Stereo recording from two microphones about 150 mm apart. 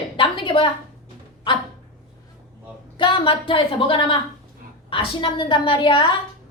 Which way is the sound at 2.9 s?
35° left (ahead or behind).